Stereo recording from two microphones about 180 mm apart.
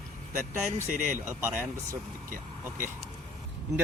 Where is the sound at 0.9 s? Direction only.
50° right (ahead or behind).